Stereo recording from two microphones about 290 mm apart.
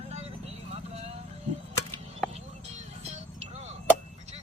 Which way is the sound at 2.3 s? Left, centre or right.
Right.